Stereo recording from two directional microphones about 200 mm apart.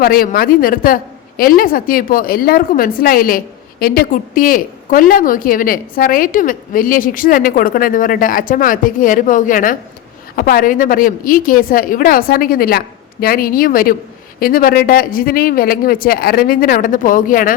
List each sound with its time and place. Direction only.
0.0 s a woman's voice: 45° left (ahead or behind)